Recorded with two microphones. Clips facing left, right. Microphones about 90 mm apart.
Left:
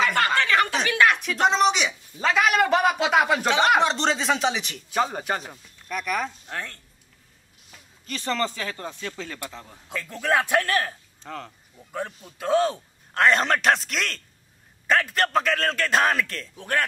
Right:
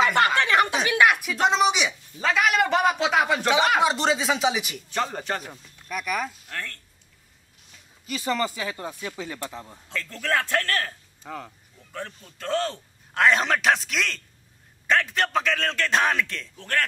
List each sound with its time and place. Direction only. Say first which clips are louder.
0.0 s a sound: right 2 dB; 15° right (ahead or behind)
0.8 s a man's voice: even; 15° right (ahead or behind)
4.8 s a man's voice: left 5 dB; 5° left (ahead or behind)
6.5 s a sound: left 1 dB; 20° left (ahead or behind)
7.7 s a sound: left 4 dB; 55° left (ahead or behind)
8.1 s speech: right 1 dB; 10° right (ahead or behind)
9.8 s a man's voice: left 3 dB; 15° left (ahead or behind)
11.2 s speech: even; 5° right (ahead or behind)
11.9 s a man's voice: left 4 dB; 15° left (ahead or behind)
13.1 s a man's voice: left 1 dB; centre (ahead or behind)
16.5 s a man's voice: left 1 dB; 15° left (ahead or behind)